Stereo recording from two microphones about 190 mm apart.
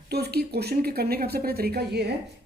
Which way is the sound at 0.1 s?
55° right (ahead or behind).